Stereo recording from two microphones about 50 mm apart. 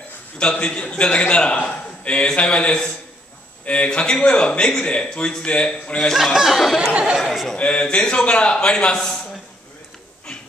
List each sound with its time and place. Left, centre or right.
0.6 s a man's voice: left
6.1 s speech: centre
6.9 s speech: centre
7.2 s speech: centre
7.5 s a man's voice: left
8.9 s a man's voice: centre